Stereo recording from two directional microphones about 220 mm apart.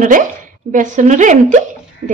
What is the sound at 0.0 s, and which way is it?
A woman's voice, 35° right (ahead or behind).